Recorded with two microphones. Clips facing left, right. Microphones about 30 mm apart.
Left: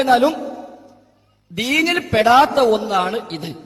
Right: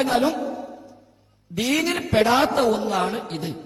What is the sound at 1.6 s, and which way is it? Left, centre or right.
A man's voice, left.